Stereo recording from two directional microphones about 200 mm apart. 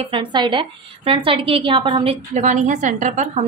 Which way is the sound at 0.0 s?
25° right (ahead or behind).